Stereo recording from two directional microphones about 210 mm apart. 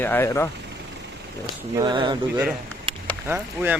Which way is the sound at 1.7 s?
20° right (ahead or behind).